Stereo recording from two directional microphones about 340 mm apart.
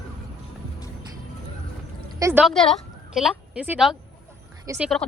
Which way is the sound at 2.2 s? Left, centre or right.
Centre.